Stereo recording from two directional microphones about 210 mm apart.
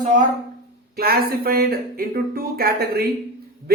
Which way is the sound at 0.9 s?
45° right (ahead or behind).